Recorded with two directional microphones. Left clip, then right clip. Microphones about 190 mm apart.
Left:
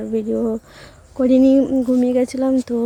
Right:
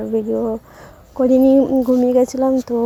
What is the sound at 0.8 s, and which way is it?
A woman's voice, centre (ahead or behind).